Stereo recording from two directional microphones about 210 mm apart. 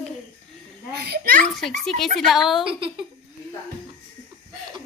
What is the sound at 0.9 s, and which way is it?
Speech, 50° right (ahead or behind).